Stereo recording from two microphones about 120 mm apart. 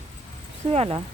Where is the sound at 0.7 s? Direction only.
55° right (ahead or behind).